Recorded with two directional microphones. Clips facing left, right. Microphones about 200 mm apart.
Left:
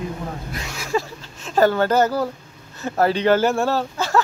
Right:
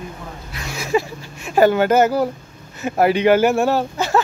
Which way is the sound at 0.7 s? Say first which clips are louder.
Right 4 dB; 15° right (ahead or behind).